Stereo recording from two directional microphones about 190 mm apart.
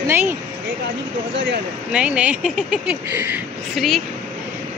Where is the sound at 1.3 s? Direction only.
70° right (ahead or behind).